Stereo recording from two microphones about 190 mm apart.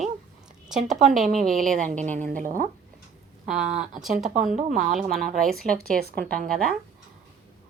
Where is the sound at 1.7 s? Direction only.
40° right (ahead or behind).